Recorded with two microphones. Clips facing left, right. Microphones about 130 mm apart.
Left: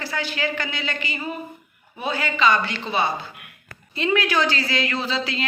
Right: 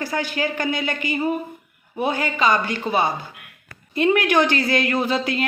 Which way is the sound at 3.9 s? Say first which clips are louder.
Right 4 dB; 50° right (ahead or behind).